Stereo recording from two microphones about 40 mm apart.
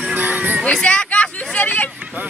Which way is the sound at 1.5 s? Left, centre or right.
Left.